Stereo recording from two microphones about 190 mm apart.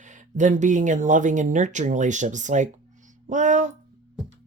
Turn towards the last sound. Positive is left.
turn(degrees=-40)  # may be behind; listen again after turning